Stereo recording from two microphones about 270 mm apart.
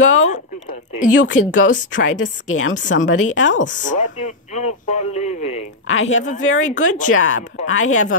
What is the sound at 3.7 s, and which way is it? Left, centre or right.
Speech, left.